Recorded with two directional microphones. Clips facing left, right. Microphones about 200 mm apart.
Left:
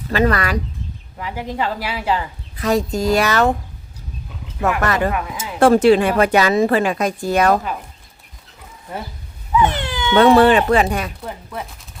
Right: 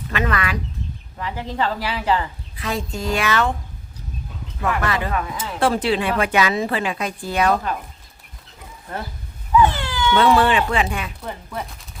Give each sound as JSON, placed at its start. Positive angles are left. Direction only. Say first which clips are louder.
{"t": 0.1, "sound": "speech", "louder": "left 6 dB", "side_deg": 35}
{"t": 1.2, "sound": "speech", "louder": "left 1 dB", "side_deg": 10}
{"t": 2.6, "sound": "speech", "louder": "left 8 dB", "side_deg": 40}
{"t": 4.8, "sound": "a woman's voice", "louder": "left 5 dB", "side_deg": 45}
{"t": 5.1, "sound": "speech", "louder": "even", "side_deg": 10}
{"t": 5.5, "sound": "a woman's voice", "louder": "left 8 dB", "side_deg": 45}
{"t": 9.6, "sound": "cat", "louder": "right 1 dB", "side_deg": 20}
{"t": 10.3, "sound": "speech", "louder": "left 6 dB", "side_deg": 40}
{"t": 11.2, "sound": "speech", "louder": "left 1 dB", "side_deg": 0}